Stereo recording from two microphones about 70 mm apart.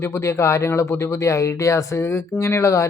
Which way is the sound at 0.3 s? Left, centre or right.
Left.